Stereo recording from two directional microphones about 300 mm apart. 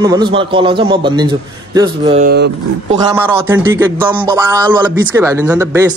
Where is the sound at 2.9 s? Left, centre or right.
Centre.